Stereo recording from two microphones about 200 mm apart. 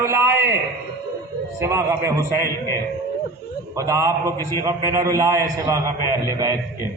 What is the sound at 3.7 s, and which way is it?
A man's voice, 15° right (ahead or behind).